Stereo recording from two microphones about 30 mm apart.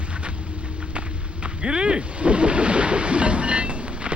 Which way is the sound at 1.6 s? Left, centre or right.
Right.